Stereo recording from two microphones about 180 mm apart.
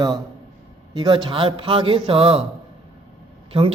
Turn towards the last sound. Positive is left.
turn(degrees=-30)  # may be behind; listen again after turning